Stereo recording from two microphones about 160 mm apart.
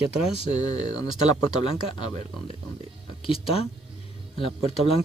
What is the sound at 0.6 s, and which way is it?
Speech, 25° left (ahead or behind).